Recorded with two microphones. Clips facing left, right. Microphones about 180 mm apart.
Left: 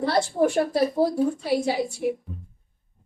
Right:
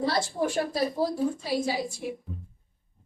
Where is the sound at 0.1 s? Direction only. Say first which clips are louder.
Left 6 dB; 65° left (ahead or behind).